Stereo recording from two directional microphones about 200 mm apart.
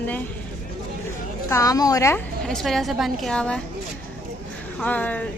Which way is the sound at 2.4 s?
5° left (ahead or behind).